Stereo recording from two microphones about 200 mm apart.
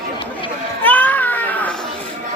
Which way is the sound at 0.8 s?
10° left (ahead or behind).